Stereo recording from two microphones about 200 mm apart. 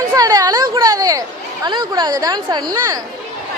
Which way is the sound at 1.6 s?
20° right (ahead or behind).